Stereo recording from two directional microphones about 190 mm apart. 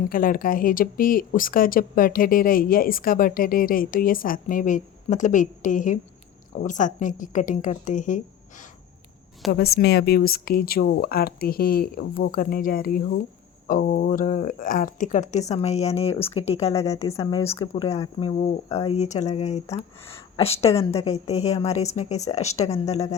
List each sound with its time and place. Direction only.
0.1 s speech: 50° left (ahead or behind)
9.5 s speech: 55° left (ahead or behind); by 16.7 s 35° left (ahead or behind)
16.7 s speech: 15° left (ahead or behind)
17.9 s speech: 25° left (ahead or behind)
18.3 s speech: 40° left (ahead or behind)